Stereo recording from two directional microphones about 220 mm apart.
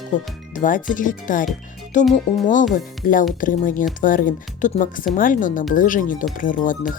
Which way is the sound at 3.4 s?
35° left (ahead or behind).